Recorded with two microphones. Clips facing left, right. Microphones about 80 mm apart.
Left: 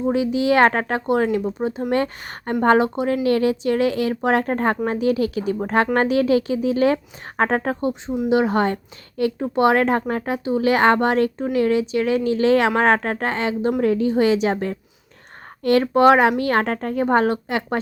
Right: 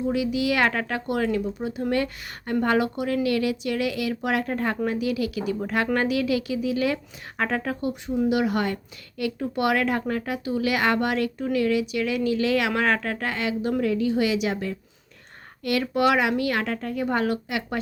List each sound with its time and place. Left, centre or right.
0.0 s speech: left